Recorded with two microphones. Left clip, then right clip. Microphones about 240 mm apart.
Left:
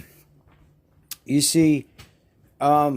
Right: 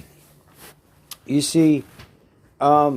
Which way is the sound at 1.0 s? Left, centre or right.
Left.